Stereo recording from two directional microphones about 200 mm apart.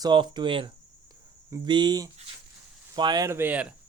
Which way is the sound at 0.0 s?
25° right (ahead or behind).